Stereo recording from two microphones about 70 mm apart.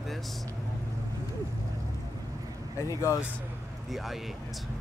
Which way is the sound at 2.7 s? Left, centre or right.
Left.